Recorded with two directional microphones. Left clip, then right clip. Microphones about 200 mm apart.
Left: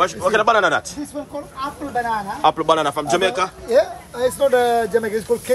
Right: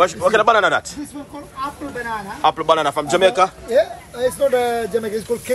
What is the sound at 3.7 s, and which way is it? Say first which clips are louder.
Speech: even; 30° left (ahead or behind).